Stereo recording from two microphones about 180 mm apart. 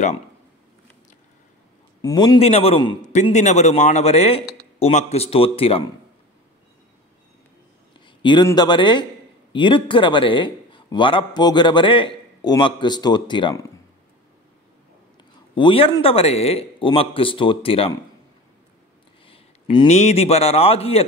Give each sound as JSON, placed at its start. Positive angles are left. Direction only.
{"t": 2.0, "sound": "a man's voice", "side_deg": 20}
{"t": 3.0, "sound": "a man's voice", "side_deg": 40}
{"t": 8.2, "sound": "a man's voice", "side_deg": 25}
{"t": 15.5, "sound": "a man's voice", "side_deg": 30}
{"t": 19.2, "sound": "a sound", "side_deg": 30}
{"t": 19.9, "sound": "a man's voice", "side_deg": 35}